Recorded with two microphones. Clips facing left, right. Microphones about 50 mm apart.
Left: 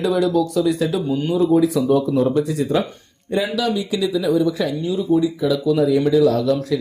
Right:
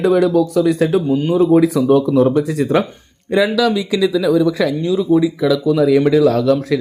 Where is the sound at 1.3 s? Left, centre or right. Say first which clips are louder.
Right 4 dB; right.